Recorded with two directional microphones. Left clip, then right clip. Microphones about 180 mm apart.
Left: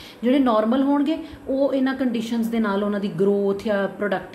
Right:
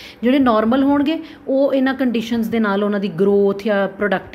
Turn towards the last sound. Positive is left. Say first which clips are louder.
# right 5 dB
turn(degrees=-40)  # may be behind; listen again after turning